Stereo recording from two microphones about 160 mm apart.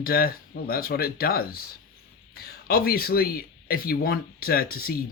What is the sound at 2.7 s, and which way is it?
Speech, 70° left (ahead or behind).